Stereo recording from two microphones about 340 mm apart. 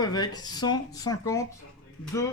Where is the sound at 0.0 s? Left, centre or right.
Centre.